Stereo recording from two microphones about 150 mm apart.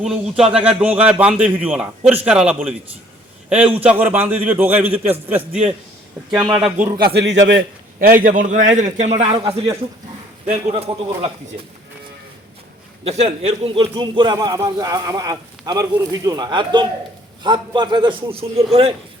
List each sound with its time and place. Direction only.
0.0 s a man's voice: 5° right (ahead or behind)
6.5 s a man's voice: 5° right (ahead or behind)
7.0 s a man's voice: 90° right; by 9.4 s 45° right (ahead or behind)
10.5 s speech: 45° right (ahead or behind)
13.1 s speech: 45° right (ahead or behind)
13.9 s a man's voice: 30° right (ahead or behind)